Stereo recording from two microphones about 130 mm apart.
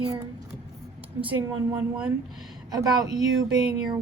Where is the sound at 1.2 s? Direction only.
10° right (ahead or behind).